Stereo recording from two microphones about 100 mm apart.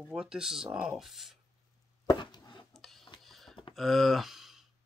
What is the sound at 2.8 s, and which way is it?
Printer, 5° left (ahead or behind).